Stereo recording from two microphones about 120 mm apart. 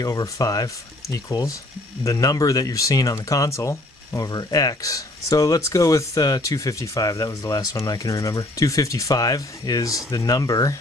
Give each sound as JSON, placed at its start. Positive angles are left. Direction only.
{"t": 0.0, "sound": "speech", "side_deg": 30}